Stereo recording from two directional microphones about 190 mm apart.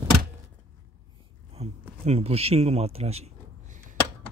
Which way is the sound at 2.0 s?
35° right (ahead or behind).